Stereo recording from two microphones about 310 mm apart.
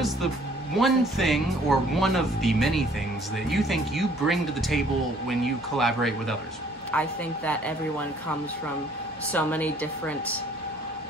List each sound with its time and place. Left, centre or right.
0.7 s speech: centre
9.3 s speech: centre